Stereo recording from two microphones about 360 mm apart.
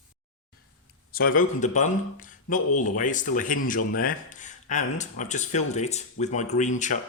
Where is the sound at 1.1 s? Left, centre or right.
Left.